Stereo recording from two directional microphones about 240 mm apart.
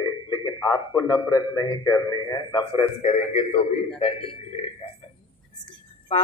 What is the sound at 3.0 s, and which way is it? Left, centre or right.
Speech, left.